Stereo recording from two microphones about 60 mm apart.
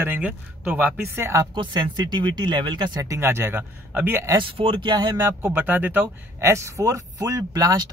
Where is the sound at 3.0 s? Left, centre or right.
Right.